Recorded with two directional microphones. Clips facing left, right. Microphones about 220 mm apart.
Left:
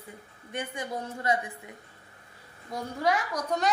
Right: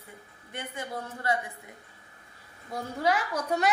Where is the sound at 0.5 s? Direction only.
15° left (ahead or behind).